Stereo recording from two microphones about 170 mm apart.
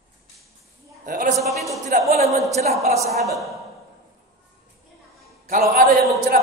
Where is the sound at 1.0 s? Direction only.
50° right (ahead or behind).